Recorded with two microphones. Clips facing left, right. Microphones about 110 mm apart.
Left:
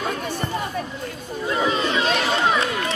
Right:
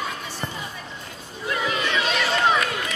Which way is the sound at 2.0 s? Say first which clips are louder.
Left 3 dB; 45° left (ahead or behind).